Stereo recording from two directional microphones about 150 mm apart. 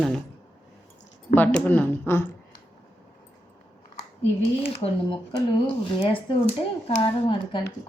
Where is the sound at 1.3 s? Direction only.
10° left (ahead or behind).